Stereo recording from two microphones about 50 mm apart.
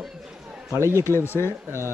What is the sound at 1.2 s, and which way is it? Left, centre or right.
Speech, left.